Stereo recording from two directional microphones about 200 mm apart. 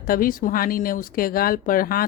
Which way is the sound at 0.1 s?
45° left (ahead or behind).